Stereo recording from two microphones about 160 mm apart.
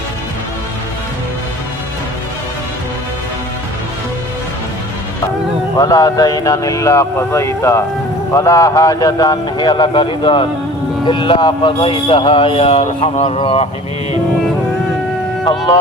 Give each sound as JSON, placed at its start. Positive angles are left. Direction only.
{"t": 5.7, "sound": "speech", "side_deg": 25}
{"t": 15.4, "sound": "speech", "side_deg": 30}